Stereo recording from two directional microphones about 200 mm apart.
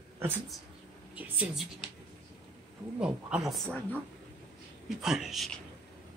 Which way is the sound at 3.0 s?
5° right (ahead or behind).